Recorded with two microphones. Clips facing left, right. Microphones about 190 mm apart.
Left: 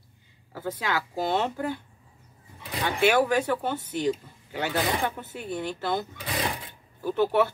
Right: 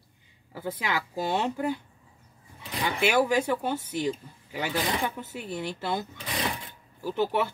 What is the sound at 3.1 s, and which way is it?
Speech, 10° right (ahead or behind).